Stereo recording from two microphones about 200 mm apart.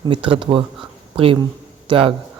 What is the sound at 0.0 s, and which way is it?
Speech, 25° right (ahead or behind).